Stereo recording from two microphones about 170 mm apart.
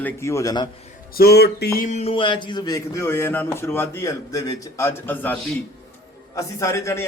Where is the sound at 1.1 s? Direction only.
65° left (ahead or behind).